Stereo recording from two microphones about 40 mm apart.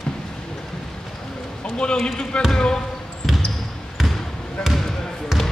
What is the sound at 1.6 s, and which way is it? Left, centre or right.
A man's voice, left.